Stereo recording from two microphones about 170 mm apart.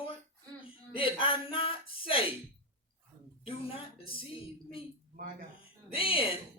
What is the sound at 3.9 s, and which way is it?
Speech, 30° left (ahead or behind).